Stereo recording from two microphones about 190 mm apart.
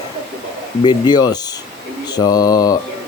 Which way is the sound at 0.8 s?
20° left (ahead or behind).